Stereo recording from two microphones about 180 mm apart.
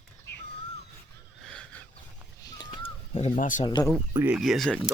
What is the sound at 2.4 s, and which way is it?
Crow, 20° left (ahead or behind).